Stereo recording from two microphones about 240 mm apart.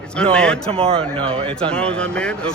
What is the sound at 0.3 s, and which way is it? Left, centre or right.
Speech, centre.